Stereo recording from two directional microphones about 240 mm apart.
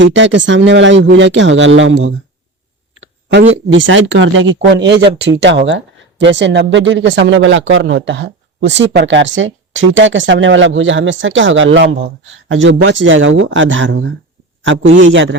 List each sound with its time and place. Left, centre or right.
0.0 s speech: right
3.0 s a sound: right
3.7 s speech: right